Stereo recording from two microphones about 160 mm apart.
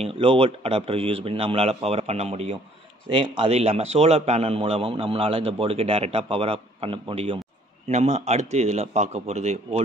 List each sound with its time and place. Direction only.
0.0 s a man's voice: 35° right (ahead or behind)